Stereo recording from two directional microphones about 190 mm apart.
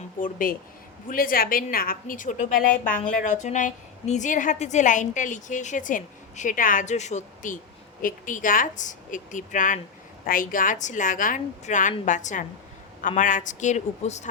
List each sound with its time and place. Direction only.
0.2 s a woman's voice: 45° left (ahead or behind)